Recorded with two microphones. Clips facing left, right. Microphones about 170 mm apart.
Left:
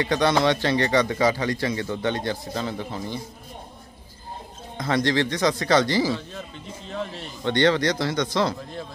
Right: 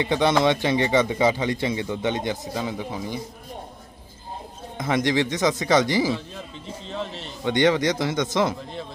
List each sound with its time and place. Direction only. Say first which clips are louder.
0.0 s speech: right 1 dB; 20° right (ahead or behind)
4.8 s speech: even; 15° right (ahead or behind)
6.9 s a man's voice: even; centre (ahead or behind)
7.4 s speech: right 1 dB; 15° right (ahead or behind)